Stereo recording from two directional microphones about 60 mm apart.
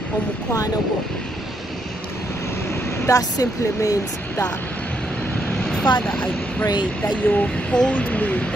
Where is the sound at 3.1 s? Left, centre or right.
Left.